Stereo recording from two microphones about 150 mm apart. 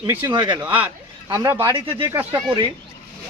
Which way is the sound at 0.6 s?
10° right (ahead or behind).